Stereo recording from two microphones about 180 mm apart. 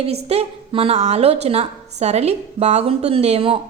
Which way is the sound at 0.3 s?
35° right (ahead or behind).